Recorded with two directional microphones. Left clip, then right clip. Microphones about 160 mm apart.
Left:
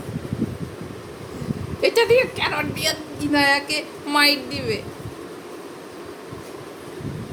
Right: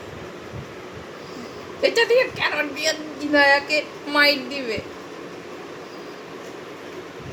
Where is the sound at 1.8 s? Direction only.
90° left.